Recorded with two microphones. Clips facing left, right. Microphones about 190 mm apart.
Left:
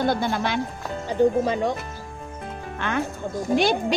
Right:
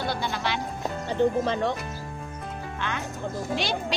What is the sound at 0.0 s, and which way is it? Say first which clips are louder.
Speech: left 6 dB; 50° left (ahead or behind).